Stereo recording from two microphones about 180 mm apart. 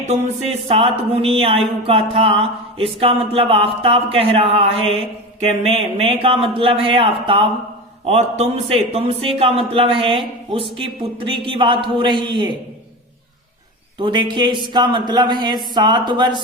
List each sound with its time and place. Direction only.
0.0 s speech: 35° right (ahead or behind)
14.0 s speech: 25° right (ahead or behind)